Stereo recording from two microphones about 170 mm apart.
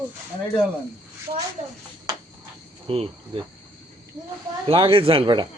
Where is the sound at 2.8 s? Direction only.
35° right (ahead or behind).